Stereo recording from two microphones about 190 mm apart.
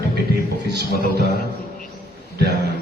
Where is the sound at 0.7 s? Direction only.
60° right (ahead or behind).